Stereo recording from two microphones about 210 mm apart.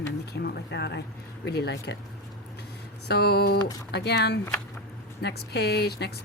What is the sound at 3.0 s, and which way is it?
Speech, 50° left (ahead or behind).